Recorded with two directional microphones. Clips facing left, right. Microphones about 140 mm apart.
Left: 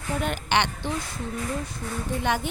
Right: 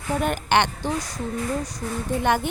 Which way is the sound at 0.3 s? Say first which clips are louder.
Right 4 dB; 50° right (ahead or behind).